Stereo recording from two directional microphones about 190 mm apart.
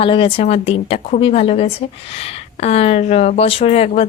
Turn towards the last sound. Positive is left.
turn(degrees=35)  # may be behind; listen again after turning